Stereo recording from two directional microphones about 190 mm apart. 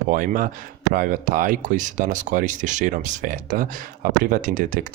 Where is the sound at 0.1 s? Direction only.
45° right (ahead or behind).